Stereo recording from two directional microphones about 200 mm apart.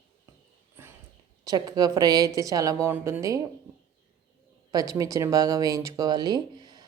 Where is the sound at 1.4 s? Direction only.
20° right (ahead or behind).